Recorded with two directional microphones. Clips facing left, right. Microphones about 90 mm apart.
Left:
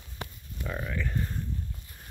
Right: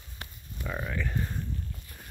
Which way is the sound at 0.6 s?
5° right (ahead or behind).